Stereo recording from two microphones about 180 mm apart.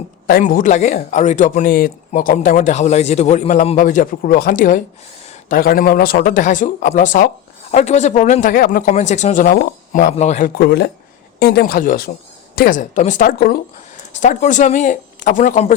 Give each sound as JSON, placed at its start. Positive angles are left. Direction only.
{"t": 0.3, "sound": "speech", "side_deg": 50}
{"t": 8.9, "sound": "speech", "side_deg": 40}
{"t": 10.6, "sound": "speech", "side_deg": 65}